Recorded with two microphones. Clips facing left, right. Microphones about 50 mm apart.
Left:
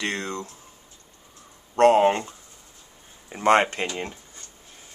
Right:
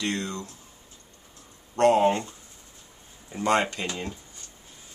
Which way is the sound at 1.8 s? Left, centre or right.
Left.